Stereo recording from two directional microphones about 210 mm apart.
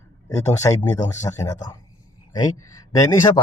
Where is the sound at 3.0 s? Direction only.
15° left (ahead or behind).